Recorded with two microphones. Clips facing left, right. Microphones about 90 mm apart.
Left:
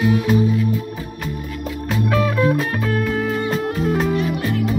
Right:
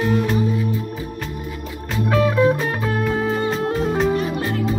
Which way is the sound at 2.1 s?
20° right (ahead or behind).